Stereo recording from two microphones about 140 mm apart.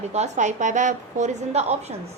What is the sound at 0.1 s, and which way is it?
A woman's voice, 55° right (ahead or behind).